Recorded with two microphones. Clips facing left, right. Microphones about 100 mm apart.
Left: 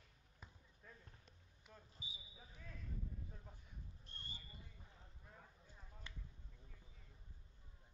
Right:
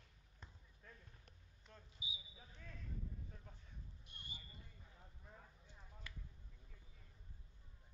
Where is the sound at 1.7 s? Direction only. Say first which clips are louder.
Even; 10° left (ahead or behind).